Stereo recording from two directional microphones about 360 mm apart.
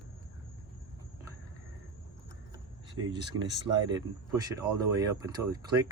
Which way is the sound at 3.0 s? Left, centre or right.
Right.